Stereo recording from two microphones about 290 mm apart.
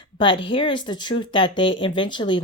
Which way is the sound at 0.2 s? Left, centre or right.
Centre.